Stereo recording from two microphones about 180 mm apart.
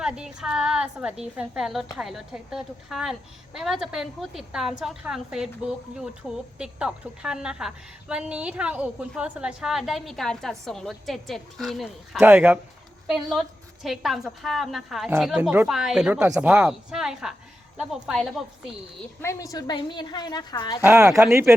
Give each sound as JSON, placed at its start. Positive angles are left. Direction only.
{"t": 0.0, "sound": "a woman's voice", "side_deg": -5}
{"t": 19.2, "sound": "a woman's voice", "side_deg": 15}
{"t": 20.8, "sound": "speech", "side_deg": -10}